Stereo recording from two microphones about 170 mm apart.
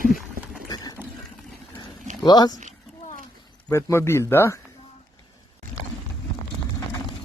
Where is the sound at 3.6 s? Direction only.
15° left (ahead or behind).